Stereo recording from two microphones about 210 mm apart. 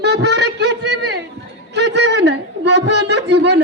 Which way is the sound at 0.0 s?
55° right (ahead or behind).